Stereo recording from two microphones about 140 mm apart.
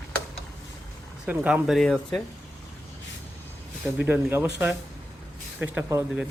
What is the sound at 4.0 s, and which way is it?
Speech, 10° right (ahead or behind).